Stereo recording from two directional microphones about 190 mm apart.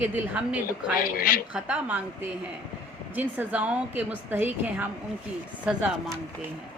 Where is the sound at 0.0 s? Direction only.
5° right (ahead or behind).